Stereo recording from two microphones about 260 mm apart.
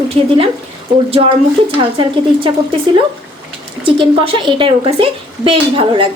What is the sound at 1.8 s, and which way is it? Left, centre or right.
A woman's voice, centre.